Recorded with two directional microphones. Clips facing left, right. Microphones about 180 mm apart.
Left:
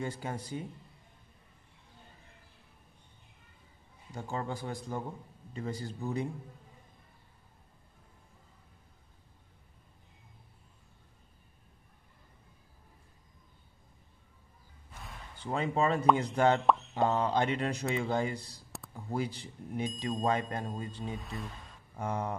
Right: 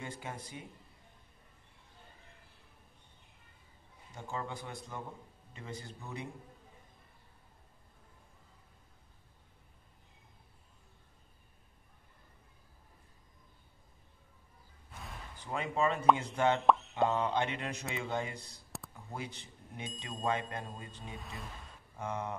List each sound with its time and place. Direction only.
0.0 s speech: 35° left (ahead or behind)
4.1 s speech: 35° left (ahead or behind)
15.3 s speech: 30° left (ahead or behind)
21.2 s speech: centre (ahead or behind)
21.9 s speech: 35° left (ahead or behind)